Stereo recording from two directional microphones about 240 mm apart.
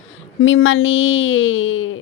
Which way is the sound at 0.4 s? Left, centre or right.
Left.